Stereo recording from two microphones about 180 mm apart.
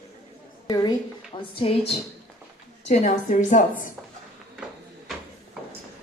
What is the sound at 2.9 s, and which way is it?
A woman's voice, 40° left (ahead or behind).